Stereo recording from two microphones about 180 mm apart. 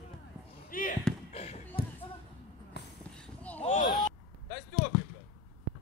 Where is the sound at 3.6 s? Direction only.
40° left (ahead or behind).